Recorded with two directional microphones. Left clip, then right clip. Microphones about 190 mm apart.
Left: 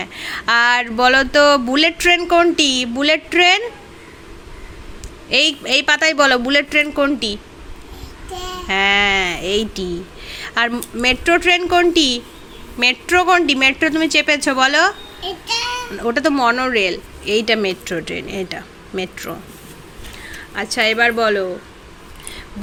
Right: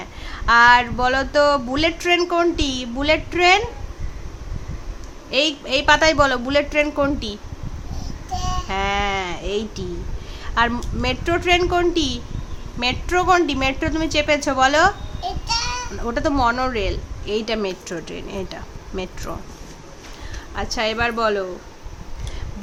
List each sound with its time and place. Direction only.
0.0 s speech: 20° left (ahead or behind)
5.3 s speech: 15° left (ahead or behind)
8.6 s speech: 10° left (ahead or behind)
15.2 s child singing: 20° right (ahead or behind)
16.0 s speech: 10° left (ahead or behind)
20.6 s speech: centre (ahead or behind)